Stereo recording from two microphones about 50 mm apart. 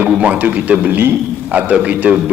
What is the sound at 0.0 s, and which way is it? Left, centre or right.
A man's voice, right.